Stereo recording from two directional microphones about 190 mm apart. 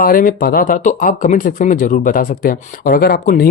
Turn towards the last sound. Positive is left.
turn(degrees=55)  # may be behind; listen again after turning